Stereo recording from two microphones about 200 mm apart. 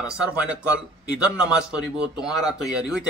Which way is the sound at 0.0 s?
5° right (ahead or behind).